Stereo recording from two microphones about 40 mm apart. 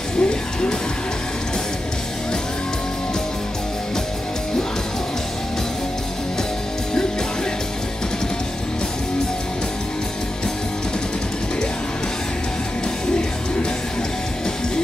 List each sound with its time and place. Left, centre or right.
0.2 s music: left